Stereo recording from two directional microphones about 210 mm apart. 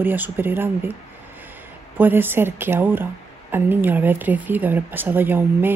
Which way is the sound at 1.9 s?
10° right (ahead or behind).